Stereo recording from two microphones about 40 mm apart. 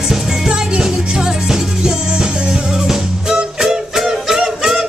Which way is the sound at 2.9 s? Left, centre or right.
Centre.